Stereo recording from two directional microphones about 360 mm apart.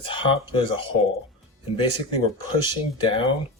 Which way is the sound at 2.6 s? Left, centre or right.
Centre.